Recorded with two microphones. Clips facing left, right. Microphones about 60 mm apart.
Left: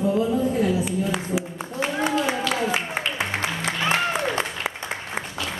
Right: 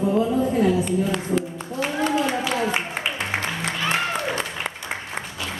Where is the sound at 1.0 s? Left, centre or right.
Centre.